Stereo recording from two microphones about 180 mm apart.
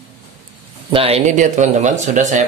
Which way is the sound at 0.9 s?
35° right (ahead or behind).